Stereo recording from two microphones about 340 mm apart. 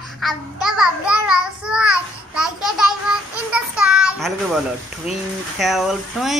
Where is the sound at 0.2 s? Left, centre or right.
Centre.